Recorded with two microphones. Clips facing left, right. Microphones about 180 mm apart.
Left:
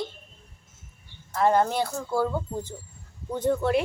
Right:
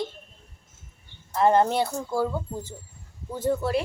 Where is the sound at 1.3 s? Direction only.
20° right (ahead or behind).